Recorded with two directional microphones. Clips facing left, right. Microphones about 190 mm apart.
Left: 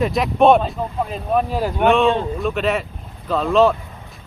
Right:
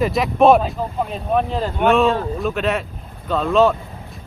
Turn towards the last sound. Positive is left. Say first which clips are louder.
# even
turn(degrees=0)  # may be behind; listen again after turning